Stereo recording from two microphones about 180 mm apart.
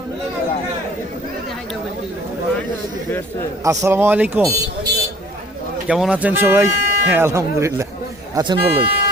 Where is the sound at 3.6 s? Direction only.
15° right (ahead or behind).